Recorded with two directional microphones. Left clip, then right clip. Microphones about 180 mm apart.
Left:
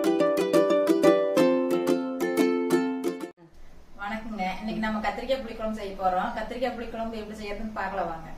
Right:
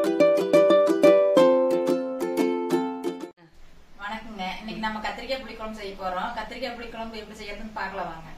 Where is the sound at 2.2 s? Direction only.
40° right (ahead or behind).